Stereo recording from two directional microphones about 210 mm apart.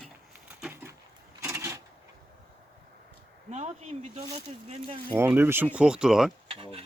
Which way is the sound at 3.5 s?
35° right (ahead or behind).